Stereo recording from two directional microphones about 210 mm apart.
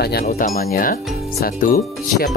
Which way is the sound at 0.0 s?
45° left (ahead or behind).